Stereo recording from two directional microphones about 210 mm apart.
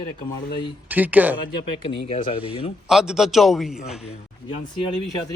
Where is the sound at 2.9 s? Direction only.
5° right (ahead or behind).